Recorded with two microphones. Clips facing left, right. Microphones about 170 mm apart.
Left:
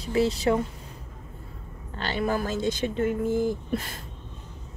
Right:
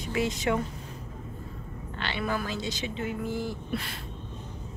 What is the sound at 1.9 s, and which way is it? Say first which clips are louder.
Speech: left 4 dB; 40° left (ahead or behind).